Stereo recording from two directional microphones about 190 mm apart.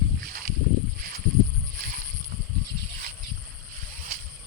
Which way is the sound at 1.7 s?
45° right (ahead or behind).